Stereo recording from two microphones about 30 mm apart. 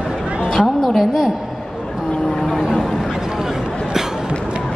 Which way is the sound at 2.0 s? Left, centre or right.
Left.